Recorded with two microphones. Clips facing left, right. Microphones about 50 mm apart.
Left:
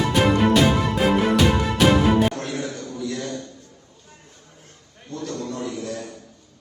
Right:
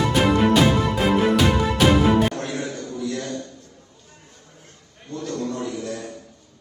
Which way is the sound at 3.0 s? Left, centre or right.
Right.